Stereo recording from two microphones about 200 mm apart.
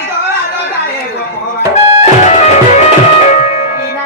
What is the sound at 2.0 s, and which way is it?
Music, 35° left (ahead or behind).